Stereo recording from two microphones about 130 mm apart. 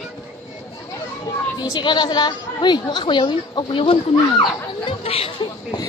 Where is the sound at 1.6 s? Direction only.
35° left (ahead or behind).